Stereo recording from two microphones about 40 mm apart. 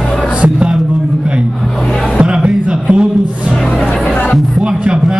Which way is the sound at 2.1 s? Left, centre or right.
Right.